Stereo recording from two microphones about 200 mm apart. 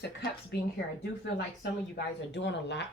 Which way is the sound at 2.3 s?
60° left (ahead or behind).